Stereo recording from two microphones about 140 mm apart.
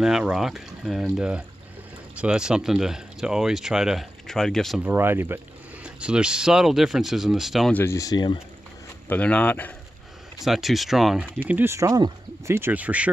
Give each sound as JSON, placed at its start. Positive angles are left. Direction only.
{"t": 0.0, "sound": "speech", "side_deg": -5}
{"t": 4.8, "sound": "speech", "side_deg": -15}
{"t": 7.7, "sound": "speech", "side_deg": 20}
{"t": 9.1, "sound": "speech", "side_deg": 10}
{"t": 10.4, "sound": "speech", "side_deg": 0}
{"t": 11.4, "sound": "speech", "side_deg": -15}